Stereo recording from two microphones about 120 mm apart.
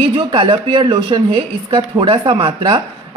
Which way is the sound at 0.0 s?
40° right (ahead or behind).